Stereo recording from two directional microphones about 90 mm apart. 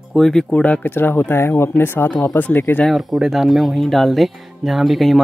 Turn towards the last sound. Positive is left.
turn(degrees=0)  # may be behind; listen again after turning